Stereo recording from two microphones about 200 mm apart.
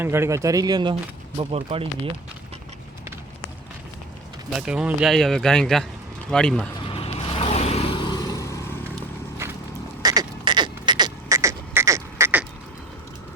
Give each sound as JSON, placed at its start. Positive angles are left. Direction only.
{"t": 0.0, "sound": "speech", "side_deg": -10}
{"t": 4.5, "sound": "speech", "side_deg": -5}
{"t": 6.8, "sound": "vehicle", "side_deg": 30}
{"t": 10.0, "sound": "beatboxing", "side_deg": -20}